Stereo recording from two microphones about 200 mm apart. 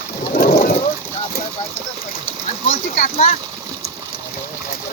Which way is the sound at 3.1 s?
30° left (ahead or behind).